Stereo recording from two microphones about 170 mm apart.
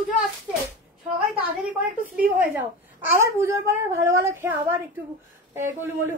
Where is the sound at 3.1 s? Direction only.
15° right (ahead or behind).